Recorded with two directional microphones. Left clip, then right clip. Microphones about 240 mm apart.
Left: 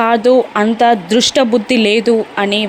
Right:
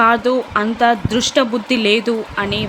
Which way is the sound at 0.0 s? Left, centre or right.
Centre.